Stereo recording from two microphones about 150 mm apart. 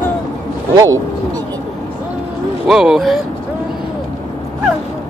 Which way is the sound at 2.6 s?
5° right (ahead or behind).